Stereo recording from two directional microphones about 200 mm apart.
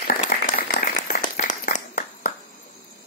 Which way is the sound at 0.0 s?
40° left (ahead or behind).